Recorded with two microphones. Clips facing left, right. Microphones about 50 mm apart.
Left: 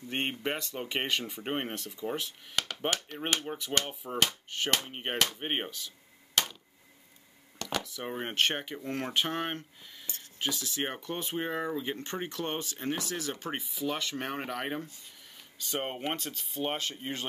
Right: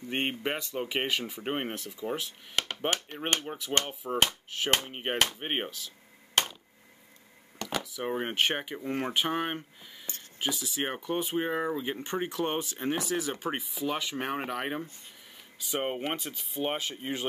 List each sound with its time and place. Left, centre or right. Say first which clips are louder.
0.1 s speech: right 2 dB; centre
6.4 s a sound: right 2 dB; right
7.5 s speech: right 1 dB; centre
10.1 s speech: right 2 dB; right
10.4 s speech: right 1 dB; centre